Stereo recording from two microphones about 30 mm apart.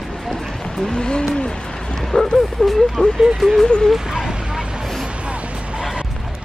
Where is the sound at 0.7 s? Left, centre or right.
Left.